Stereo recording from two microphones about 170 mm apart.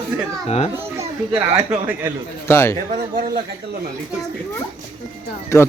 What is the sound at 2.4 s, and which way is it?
Speech, 15° left (ahead or behind).